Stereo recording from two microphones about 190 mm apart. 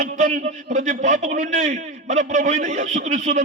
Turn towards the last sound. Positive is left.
turn(degrees=-40)  # may be behind; listen again after turning